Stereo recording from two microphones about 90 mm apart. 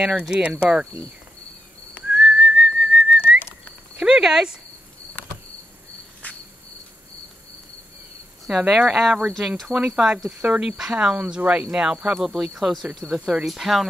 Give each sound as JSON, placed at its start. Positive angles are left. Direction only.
{"t": 0.0, "sound": "speech", "side_deg": -10}
{"t": 2.0, "sound": "whistling", "side_deg": -10}
{"t": 3.9, "sound": "speech", "side_deg": -10}
{"t": 6.2, "sound": "cricket", "side_deg": 20}
{"t": 8.5, "sound": "speech", "side_deg": -5}